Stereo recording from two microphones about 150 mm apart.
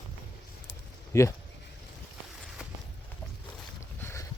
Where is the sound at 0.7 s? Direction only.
20° left (ahead or behind).